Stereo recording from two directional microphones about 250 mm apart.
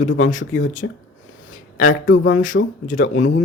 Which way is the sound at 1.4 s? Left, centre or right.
Left.